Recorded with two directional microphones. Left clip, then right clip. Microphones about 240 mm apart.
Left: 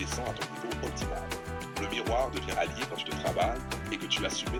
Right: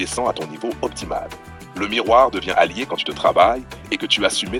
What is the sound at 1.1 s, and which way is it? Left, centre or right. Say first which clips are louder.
Speech: right 10 dB; right.